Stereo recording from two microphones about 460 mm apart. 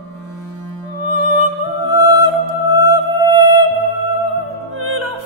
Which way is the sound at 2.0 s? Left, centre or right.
Left.